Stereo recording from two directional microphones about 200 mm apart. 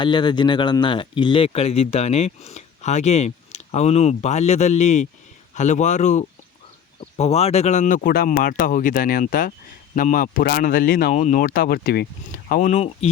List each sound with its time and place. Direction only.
0.0 s speech: 25° left (ahead or behind)